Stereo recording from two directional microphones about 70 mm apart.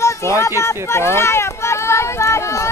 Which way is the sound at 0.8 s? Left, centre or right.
Left.